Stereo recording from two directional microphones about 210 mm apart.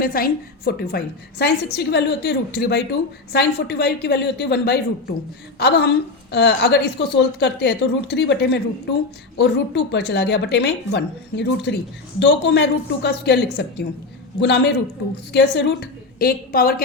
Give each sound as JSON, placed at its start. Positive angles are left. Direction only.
{"t": 0.0, "sound": "a woman's voice", "side_deg": 45}